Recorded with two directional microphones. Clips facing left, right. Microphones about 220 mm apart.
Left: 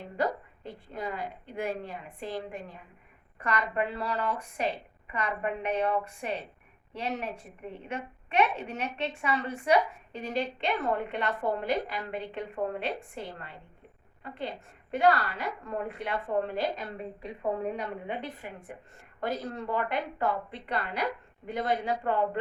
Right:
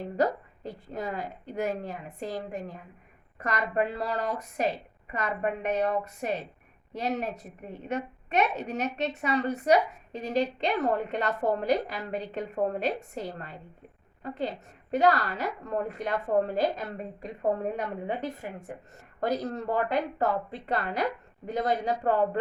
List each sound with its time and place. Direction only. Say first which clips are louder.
0.2 s a woman's voice: right 3 dB; 40° right (ahead or behind)